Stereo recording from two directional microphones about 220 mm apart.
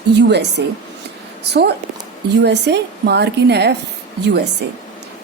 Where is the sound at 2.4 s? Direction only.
50° right (ahead or behind).